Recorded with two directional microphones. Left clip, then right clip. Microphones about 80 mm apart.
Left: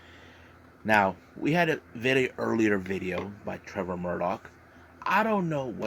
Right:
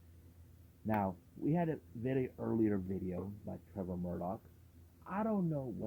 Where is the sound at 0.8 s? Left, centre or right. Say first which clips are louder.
Left 14 dB; left.